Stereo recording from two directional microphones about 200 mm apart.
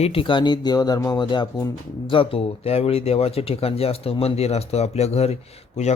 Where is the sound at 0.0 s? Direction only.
25° left (ahead or behind).